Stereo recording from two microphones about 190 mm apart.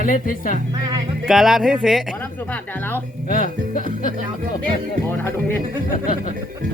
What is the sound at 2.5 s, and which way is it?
Speech, 10° left (ahead or behind).